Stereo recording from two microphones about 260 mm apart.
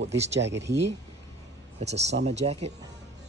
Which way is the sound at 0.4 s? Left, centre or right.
Right.